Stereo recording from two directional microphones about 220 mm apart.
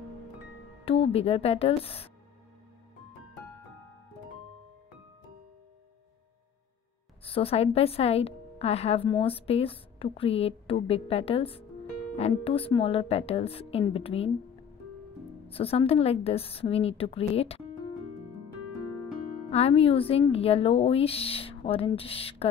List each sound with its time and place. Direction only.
0.8 s a woman's voice: 25° left (ahead or behind)
7.2 s a woman's voice: 25° left (ahead or behind)
15.4 s a woman's voice: 25° left (ahead or behind)
19.5 s a woman's voice: 25° left (ahead or behind)